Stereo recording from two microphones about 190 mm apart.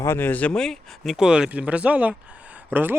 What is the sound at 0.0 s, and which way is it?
Speech, 10° left (ahead or behind).